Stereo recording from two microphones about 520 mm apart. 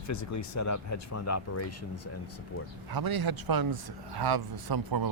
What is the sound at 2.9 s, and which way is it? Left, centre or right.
A man's voice, right.